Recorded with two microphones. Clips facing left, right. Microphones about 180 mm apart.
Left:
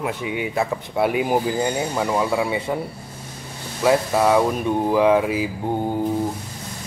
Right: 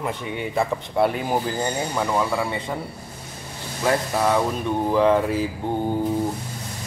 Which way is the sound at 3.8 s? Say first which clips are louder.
Left 4 dB; 10° left (ahead or behind).